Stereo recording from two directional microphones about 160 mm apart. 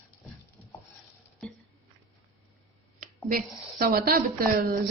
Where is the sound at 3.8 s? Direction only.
70° right (ahead or behind).